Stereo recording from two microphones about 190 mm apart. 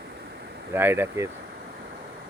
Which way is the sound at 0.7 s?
10° right (ahead or behind).